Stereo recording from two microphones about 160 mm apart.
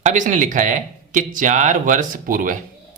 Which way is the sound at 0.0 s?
50° right (ahead or behind).